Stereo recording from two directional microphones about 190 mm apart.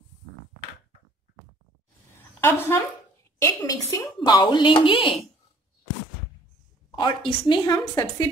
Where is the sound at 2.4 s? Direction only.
10° left (ahead or behind); by 5.1 s 25° left (ahead or behind).